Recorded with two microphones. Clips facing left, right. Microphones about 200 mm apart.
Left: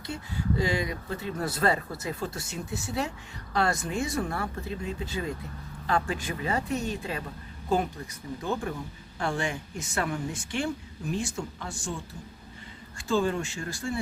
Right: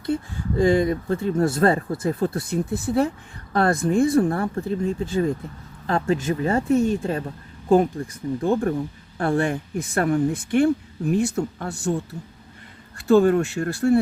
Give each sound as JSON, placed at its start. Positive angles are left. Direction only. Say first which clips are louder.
{"t": 0.0, "sound": "speech", "louder": "right 9 dB", "side_deg": -50}
{"t": 13.0, "sound": "speech", "louder": "right 11 dB", "side_deg": -60}